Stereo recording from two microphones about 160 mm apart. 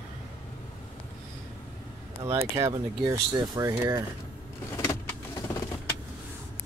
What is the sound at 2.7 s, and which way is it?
Speech, 20° right (ahead or behind).